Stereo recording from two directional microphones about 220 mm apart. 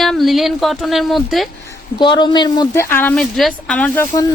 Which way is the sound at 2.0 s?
20° left (ahead or behind).